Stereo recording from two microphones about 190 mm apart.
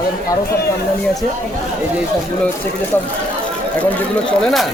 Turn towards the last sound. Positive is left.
turn(degrees=5)  # may be behind; listen again after turning